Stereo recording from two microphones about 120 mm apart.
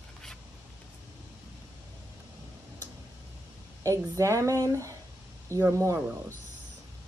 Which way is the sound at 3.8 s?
25° right (ahead or behind).